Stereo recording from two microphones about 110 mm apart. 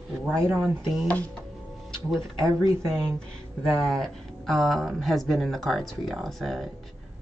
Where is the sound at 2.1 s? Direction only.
25° right (ahead or behind).